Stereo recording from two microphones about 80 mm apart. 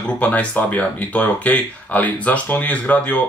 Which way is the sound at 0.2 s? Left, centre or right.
Centre.